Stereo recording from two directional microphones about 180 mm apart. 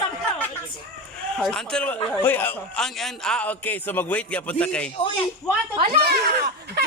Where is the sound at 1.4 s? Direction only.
Centre (ahead or behind).